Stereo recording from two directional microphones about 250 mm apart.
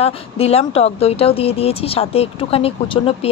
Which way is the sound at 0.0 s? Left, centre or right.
Left.